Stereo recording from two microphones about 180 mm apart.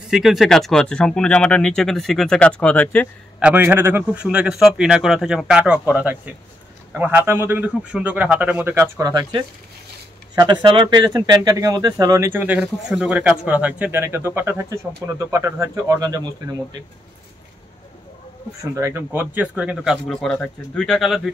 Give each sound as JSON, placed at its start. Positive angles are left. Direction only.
{"t": 0.1, "sound": "speech", "side_deg": 0}
{"t": 3.3, "sound": "speech", "side_deg": -10}
{"t": 18.8, "sound": "speech", "side_deg": -15}